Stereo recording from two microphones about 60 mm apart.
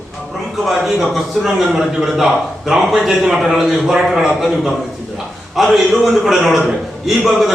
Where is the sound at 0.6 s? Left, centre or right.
Centre.